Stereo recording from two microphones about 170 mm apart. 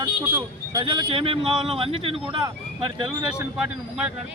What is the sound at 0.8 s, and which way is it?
Speech, 25° right (ahead or behind).